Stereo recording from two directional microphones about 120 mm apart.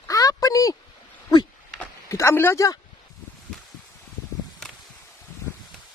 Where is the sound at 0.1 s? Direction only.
30° left (ahead or behind).